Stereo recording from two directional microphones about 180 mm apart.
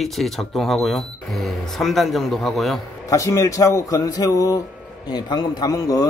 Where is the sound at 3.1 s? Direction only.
20° left (ahead or behind).